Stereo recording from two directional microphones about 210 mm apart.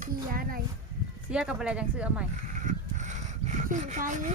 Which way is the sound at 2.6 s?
35° right (ahead or behind).